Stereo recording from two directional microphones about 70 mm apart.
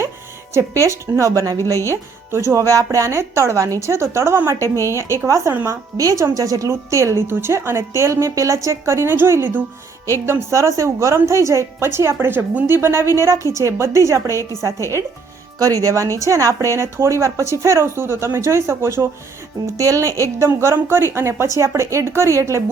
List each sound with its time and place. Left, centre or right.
0.5 s a woman's voice: right
1.3 s speech: right
1.8 s a woman's voice: right
4.6 s a woman's voice: left
5.2 s a woman's voice: right
6.0 s a woman's voice: right
10.2 s a woman's voice: right
15.5 s a woman's voice: right
19.6 s a woman's voice: right